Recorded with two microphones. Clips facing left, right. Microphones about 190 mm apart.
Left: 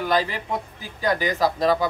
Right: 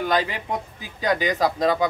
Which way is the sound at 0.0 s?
15° right (ahead or behind).